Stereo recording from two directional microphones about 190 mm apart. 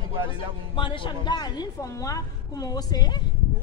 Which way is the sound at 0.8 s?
25° left (ahead or behind).